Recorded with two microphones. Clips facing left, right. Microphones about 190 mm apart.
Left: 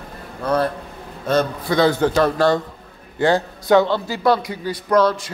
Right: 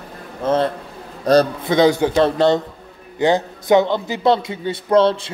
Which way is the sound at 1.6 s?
20° right (ahead or behind).